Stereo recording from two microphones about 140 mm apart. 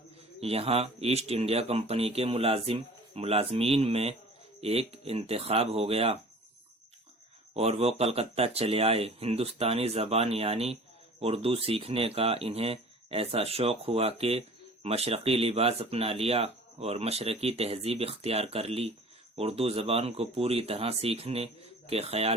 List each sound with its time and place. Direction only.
0.3 s speech: 45° right (ahead or behind)
7.5 s speech: 50° right (ahead or behind)